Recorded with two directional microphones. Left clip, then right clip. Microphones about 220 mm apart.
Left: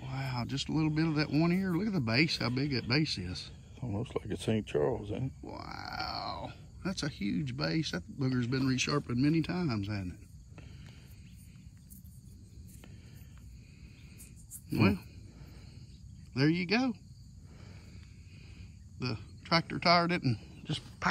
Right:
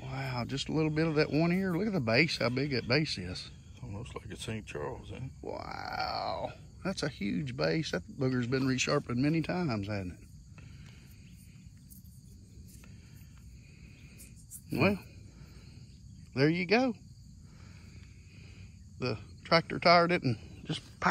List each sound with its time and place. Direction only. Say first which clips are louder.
0.0 s speech: right 2 dB; 10° left (ahead or behind)
3.8 s speech: left 7 dB; 40° left (ahead or behind)
5.5 s speech: right 5 dB; 10° left (ahead or behind)
14.7 s speech: right 1 dB; 10° left (ahead or behind)
16.3 s speech: right 3 dB; 10° left (ahead or behind)
18.9 s a man's voice: right 4 dB; 10° left (ahead or behind)